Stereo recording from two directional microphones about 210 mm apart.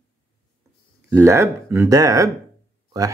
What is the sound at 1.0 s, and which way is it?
Speech, 10° right (ahead or behind).